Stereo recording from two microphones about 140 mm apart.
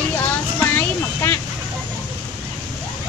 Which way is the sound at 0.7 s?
20° left (ahead or behind).